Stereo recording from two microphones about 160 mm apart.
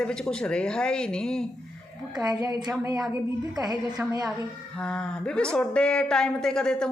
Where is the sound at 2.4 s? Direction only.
20° right (ahead or behind).